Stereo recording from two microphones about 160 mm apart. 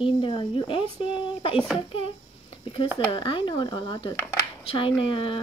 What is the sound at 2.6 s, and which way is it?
Speech, 35° left (ahead or behind).